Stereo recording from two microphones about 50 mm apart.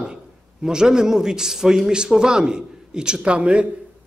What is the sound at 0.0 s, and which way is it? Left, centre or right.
A man's voice, centre.